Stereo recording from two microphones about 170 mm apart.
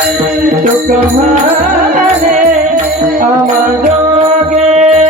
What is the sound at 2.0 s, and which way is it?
Music, 45° right (ahead or behind).